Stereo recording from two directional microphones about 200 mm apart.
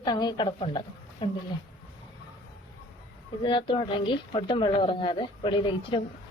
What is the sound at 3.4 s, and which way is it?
Speech, 25° left (ahead or behind).